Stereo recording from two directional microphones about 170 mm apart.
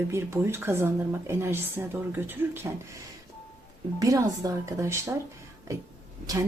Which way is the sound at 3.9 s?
20° right (ahead or behind).